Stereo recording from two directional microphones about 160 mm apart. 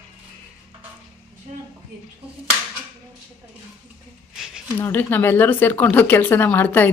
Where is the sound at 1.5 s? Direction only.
50° right (ahead or behind).